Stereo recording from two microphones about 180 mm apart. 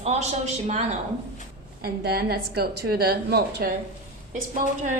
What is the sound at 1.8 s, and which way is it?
A woman's voice, 60° right (ahead or behind).